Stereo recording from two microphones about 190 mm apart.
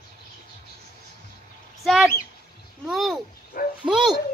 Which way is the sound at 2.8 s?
Centre (ahead or behind).